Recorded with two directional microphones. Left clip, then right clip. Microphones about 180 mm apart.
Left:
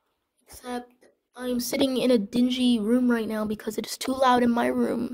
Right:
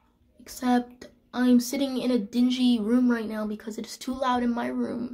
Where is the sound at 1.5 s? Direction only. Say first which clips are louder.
Left 5 dB; 50° left (ahead or behind); by 3.2 s 30° left (ahead or behind).